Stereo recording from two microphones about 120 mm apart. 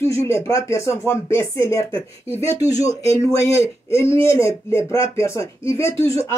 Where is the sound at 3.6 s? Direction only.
20° left (ahead or behind).